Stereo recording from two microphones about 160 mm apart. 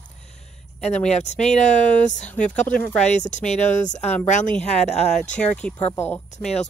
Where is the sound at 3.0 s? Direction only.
45° left (ahead or behind).